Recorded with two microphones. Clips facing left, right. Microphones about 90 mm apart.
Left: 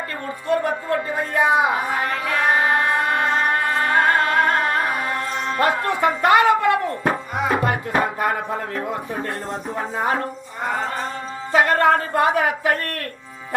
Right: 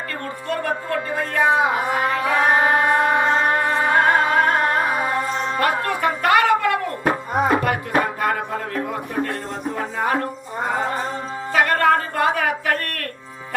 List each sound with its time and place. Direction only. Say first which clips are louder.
0.4 s speech: left 4 dB; 20° left (ahead or behind)
2.2 s music: right 2 dB; 5° right (ahead or behind)
5.5 s speech: left 3 dB; 20° left (ahead or behind)
6.2 s a sound: left 1 dB; 20° left (ahead or behind)
7.6 s music: even; 20° left (ahead or behind)
9.7 s speech: even; 20° left (ahead or behind)
11.5 s speech: left 1 dB; 20° left (ahead or behind)